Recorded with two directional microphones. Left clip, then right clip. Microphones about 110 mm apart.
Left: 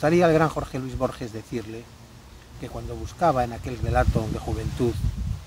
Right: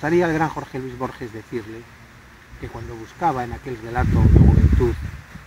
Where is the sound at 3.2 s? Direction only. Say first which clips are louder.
Even; 50° left (ahead or behind).